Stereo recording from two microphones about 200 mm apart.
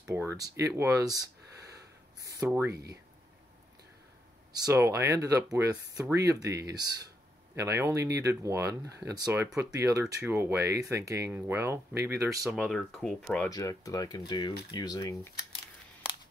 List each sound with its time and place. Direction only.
0.0 s a sound: 10° right (ahead or behind)
2.7 s speech: 55° right (ahead or behind)
4.5 s speech: 20° right (ahead or behind)
12.4 s speech: 5° left (ahead or behind)
13.5 s speech: 15° left (ahead or behind)